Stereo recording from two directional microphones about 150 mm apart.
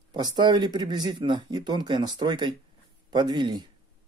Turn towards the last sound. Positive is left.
turn(degrees=-30)  # may be behind; listen again after turning